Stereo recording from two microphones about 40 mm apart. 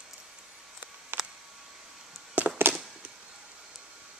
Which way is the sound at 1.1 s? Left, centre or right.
Right.